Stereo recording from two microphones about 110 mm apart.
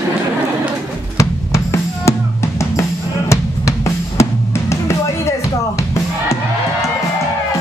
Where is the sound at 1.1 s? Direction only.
30° left (ahead or behind).